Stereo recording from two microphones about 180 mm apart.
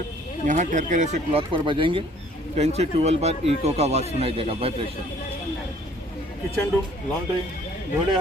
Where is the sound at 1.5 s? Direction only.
30° right (ahead or behind).